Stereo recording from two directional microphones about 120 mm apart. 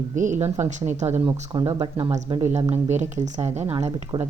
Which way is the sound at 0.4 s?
20° right (ahead or behind).